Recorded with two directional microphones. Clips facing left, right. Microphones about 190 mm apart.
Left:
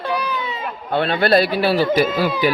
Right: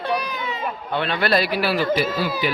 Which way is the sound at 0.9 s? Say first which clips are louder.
Left 5 dB; 35° left (ahead or behind).